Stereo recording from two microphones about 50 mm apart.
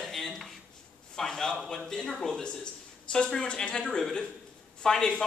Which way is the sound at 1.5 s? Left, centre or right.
Centre.